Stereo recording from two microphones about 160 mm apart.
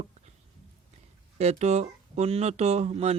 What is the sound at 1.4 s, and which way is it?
Speech, 40° right (ahead or behind).